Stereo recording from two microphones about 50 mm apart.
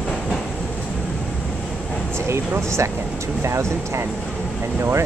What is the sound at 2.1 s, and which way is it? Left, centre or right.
Speech, right.